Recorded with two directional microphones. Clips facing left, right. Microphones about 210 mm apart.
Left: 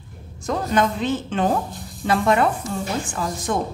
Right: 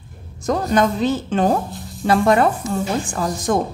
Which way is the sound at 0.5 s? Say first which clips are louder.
Right 3 dB; 40° right (ahead or behind).